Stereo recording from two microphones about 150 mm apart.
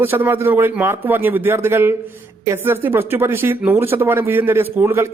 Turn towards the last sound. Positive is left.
turn(degrees=-15)  # may be behind; listen again after turning